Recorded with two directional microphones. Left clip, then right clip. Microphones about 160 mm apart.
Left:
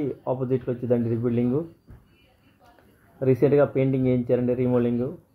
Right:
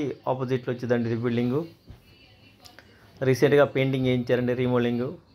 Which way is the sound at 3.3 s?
15° right (ahead or behind).